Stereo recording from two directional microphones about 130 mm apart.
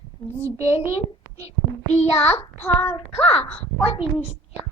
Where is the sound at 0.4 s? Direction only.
20° right (ahead or behind).